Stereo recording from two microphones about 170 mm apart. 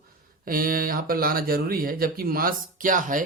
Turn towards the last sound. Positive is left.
turn(degrees=-50)  # may be behind; listen again after turning